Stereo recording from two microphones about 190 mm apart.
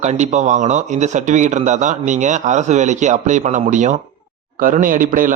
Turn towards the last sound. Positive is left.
turn(degrees=-45)  # may be behind; listen again after turning